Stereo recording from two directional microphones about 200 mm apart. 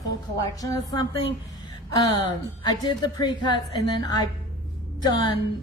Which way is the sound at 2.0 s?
20° left (ahead or behind).